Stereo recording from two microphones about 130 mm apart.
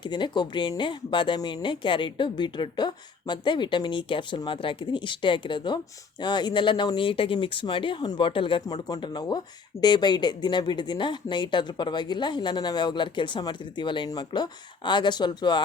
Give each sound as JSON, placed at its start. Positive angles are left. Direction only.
{"t": 0.0, "sound": "speech", "side_deg": 35}
{"t": 8.6, "sound": "speech", "side_deg": 30}